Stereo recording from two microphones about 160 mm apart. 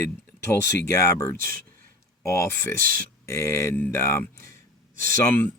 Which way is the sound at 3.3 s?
15° left (ahead or behind).